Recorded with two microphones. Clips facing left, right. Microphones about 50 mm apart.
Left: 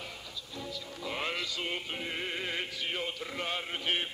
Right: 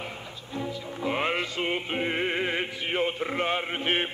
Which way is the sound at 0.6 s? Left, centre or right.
Right.